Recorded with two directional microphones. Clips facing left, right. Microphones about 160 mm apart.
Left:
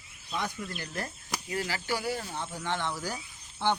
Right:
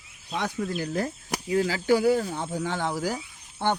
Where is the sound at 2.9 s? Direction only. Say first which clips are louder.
Right 8 dB; 90° right.